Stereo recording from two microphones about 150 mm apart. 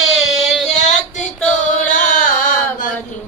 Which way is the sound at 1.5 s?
55° left (ahead or behind).